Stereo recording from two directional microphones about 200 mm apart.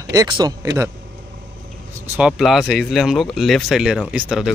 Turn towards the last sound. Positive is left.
turn(degrees=-5)  # may be behind; listen again after turning